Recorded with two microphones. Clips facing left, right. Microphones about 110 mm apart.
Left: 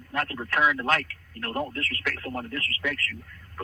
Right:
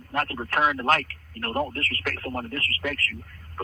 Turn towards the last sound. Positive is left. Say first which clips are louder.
# right 1 dB
turn(degrees=-45)  # may be behind; listen again after turning